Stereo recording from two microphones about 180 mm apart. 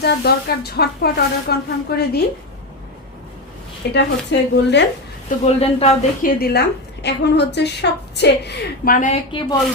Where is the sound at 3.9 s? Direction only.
75° left (ahead or behind).